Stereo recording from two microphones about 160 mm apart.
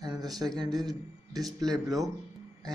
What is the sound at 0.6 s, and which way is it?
Speech, 25° right (ahead or behind).